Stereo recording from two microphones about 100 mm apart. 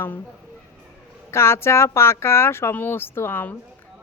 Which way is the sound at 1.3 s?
25° left (ahead or behind).